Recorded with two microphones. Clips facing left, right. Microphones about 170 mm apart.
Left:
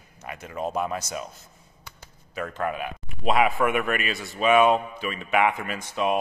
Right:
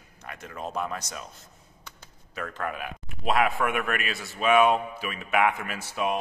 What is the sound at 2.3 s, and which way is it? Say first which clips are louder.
Speech: left 4 dB; 5° left (ahead or behind).